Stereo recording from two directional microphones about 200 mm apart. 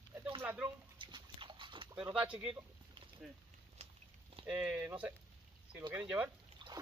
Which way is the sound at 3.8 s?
35° right (ahead or behind).